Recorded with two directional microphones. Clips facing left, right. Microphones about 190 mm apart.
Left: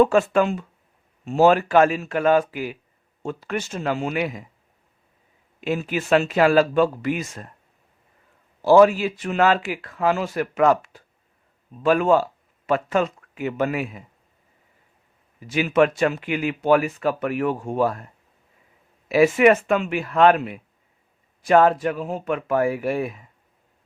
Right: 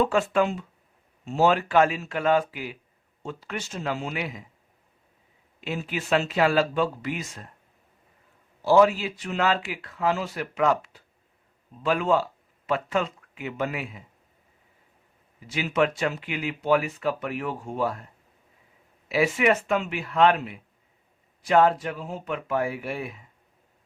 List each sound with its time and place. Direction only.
0.0 s speech: 50° left (ahead or behind)
5.5 s speech: 50° left (ahead or behind)
8.6 s speech: 50° left (ahead or behind)
15.5 s speech: 50° left (ahead or behind)
19.0 s speech: 50° left (ahead or behind)